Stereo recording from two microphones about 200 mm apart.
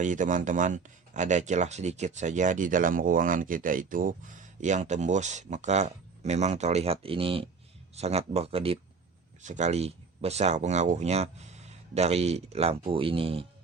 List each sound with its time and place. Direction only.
0.0 s speech: 40° right (ahead or behind)